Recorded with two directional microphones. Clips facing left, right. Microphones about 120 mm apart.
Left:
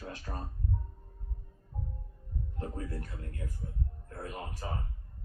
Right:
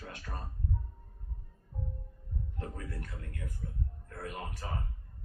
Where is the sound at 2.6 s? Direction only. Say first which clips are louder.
Left 4 dB; 30° left (ahead or behind).